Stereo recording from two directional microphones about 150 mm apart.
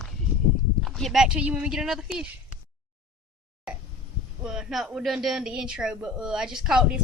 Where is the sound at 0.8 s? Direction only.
Centre (ahead or behind).